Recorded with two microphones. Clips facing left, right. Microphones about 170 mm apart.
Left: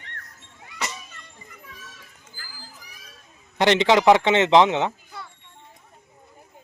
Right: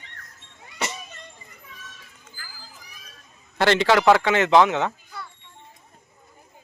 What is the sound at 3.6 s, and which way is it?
Speech, 20° left (ahead or behind).